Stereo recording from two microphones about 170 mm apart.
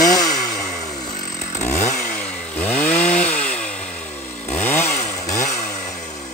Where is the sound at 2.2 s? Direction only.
5° left (ahead or behind).